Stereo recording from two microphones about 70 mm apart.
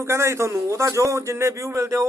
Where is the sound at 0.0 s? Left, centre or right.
Right.